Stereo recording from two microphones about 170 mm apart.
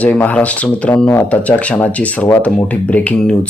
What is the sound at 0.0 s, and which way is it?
Speech, 10° left (ahead or behind).